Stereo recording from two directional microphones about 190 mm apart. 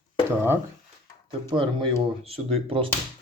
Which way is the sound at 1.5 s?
25° right (ahead or behind).